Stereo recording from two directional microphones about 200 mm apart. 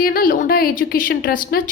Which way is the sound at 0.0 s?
45° left (ahead or behind).